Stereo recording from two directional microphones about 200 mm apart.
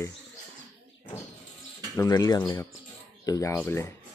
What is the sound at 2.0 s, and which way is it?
Speech, 20° left (ahead or behind).